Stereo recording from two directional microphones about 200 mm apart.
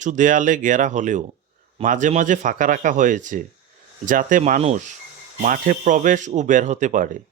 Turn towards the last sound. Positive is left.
turn(degrees=-40)  # may be behind; listen again after turning